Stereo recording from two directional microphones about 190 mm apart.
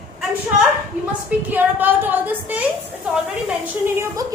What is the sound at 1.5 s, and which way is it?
A woman's voice, 10° right (ahead or behind).